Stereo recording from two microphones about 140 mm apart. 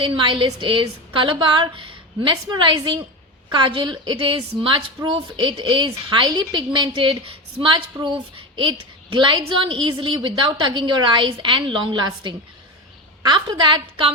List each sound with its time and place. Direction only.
0.0 s a woman's voice: 35° right (ahead or behind)